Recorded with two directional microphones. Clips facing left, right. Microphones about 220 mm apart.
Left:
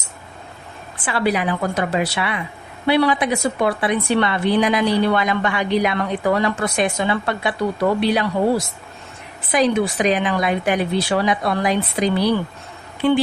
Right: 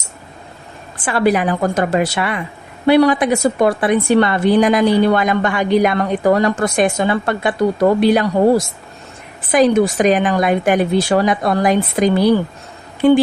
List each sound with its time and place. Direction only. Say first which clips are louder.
1.0 s a woman's voice: right 5 dB; 45° right (ahead or behind)